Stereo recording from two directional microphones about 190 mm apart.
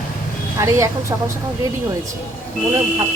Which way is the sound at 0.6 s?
15° right (ahead or behind).